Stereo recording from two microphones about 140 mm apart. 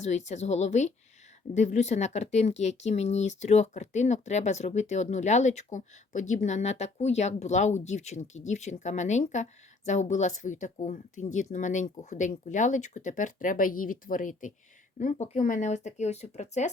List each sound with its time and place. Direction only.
0.0 s speech: 55° left (ahead or behind)
14.9 s speech: 60° left (ahead or behind)